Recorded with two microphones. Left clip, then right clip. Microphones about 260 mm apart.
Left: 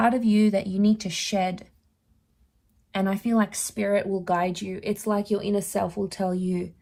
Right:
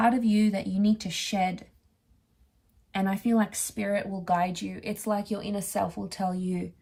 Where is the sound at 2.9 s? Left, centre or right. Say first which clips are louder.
Left 2 dB; left.